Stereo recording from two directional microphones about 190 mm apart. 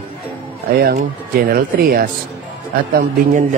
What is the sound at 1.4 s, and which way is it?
Speech, 50° right (ahead or behind).